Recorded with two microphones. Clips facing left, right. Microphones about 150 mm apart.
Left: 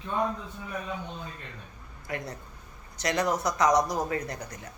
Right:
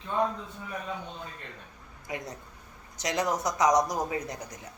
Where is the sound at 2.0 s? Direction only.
15° right (ahead or behind).